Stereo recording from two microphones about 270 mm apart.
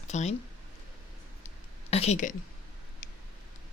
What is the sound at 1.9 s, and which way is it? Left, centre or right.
Speech, left.